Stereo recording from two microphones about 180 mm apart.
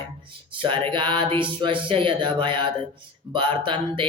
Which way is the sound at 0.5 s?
30° right (ahead or behind).